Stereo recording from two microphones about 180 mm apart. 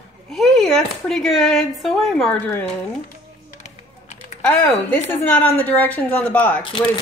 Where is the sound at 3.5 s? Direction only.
40° left (ahead or behind).